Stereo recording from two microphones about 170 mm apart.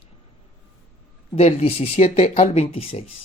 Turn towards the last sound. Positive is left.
turn(degrees=35)  # may be behind; listen again after turning